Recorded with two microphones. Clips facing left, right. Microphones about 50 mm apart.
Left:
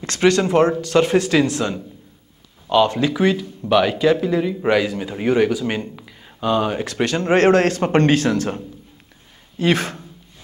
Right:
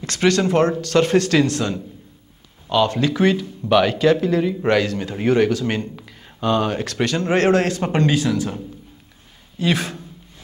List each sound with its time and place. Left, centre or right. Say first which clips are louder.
0.0 s speech: left 2 dB; left
0.4 s speech: left 1 dB; centre
3.2 s speech: even; centre
6.8 s speech: left 1 dB; left
7.1 s speech: left 3 dB; left
9.6 s speech: left 2 dB; left